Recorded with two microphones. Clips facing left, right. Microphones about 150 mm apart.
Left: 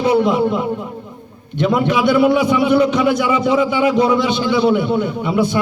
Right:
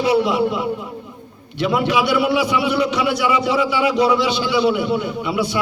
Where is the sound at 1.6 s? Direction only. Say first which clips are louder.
Left 3 dB; 50° left (ahead or behind).